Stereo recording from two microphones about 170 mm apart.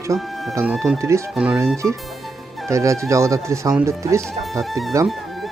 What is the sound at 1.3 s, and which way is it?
Speech, 5° right (ahead or behind).